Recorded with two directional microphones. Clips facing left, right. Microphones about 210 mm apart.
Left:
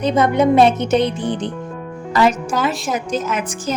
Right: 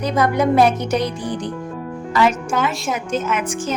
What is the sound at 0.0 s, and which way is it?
Speech, 25° left (ahead or behind).